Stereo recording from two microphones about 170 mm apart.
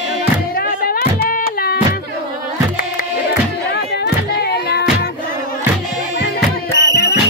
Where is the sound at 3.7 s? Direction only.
70° left (ahead or behind).